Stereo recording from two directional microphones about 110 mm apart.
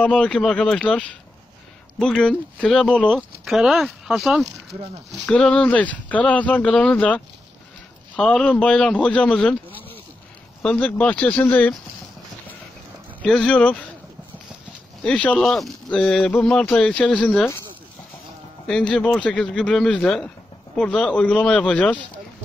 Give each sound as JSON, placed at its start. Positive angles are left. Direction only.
{"t": 0.0, "sound": "speech", "side_deg": 10}
{"t": 5.2, "sound": "speech", "side_deg": 10}
{"t": 8.2, "sound": "speech", "side_deg": 5}
{"t": 9.7, "sound": "a sound", "side_deg": 15}
{"t": 10.6, "sound": "speech", "side_deg": 10}
{"t": 13.2, "sound": "speech", "side_deg": 10}
{"t": 15.0, "sound": "speech", "side_deg": 10}
{"t": 18.7, "sound": "speech", "side_deg": 10}